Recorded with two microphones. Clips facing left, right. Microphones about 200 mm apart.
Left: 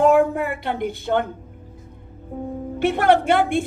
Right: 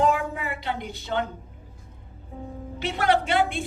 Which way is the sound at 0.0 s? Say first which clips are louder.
Left 8 dB; 55° left (ahead or behind).